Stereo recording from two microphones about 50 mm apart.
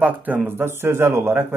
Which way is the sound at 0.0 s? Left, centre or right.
Right.